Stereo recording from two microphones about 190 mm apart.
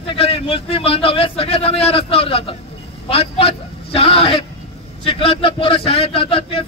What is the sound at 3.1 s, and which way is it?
Vehicle, 30° left (ahead or behind).